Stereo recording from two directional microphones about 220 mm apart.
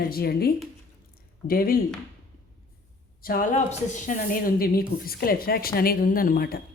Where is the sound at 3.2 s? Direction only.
40° left (ahead or behind).